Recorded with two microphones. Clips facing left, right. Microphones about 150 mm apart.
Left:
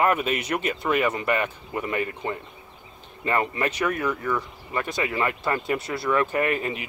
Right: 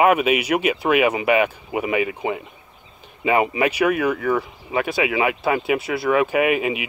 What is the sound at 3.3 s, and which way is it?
Speech, 10° right (ahead or behind).